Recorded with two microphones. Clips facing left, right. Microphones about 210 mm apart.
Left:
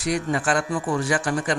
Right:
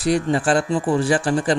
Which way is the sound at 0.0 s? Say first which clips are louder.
Right 5 dB; 30° right (ahead or behind).